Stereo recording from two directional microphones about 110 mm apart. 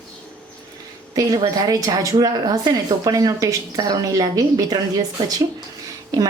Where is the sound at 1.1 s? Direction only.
35° right (ahead or behind).